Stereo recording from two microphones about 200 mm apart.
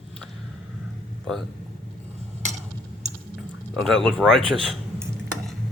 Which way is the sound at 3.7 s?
Centre (ahead or behind).